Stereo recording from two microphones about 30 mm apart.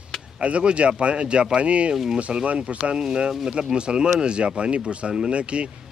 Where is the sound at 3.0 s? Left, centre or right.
Right.